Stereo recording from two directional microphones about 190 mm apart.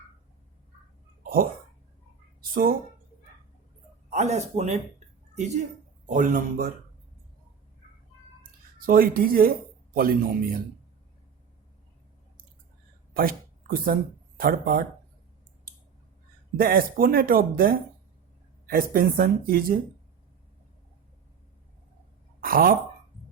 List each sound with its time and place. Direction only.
2.4 s a sound: 50° right (ahead or behind)
4.1 s speech: 35° right (ahead or behind)
6.1 s speech: 40° right (ahead or behind)
8.9 s speech: 50° right (ahead or behind)
13.1 s speech: 50° right (ahead or behind)
16.6 s speech: 50° right (ahead or behind)
22.4 s a sound: 50° right (ahead or behind)